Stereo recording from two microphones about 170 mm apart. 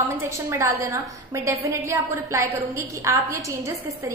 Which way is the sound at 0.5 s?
15° right (ahead or behind).